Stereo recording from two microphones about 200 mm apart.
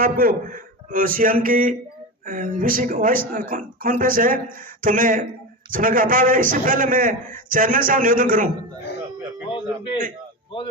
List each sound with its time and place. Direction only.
0.0 s speech: 45° right (ahead or behind)
9.5 s a man's voice: 25° left (ahead or behind)